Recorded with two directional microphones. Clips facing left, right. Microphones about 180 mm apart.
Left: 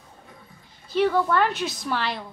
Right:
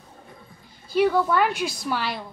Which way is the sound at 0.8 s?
10° right (ahead or behind).